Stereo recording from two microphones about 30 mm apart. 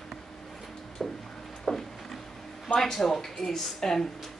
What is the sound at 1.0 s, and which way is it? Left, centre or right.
Music, centre.